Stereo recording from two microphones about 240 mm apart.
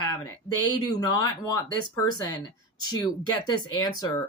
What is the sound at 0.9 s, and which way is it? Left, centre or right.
Speech, centre.